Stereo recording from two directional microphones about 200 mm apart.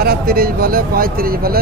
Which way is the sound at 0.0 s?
50° right (ahead or behind).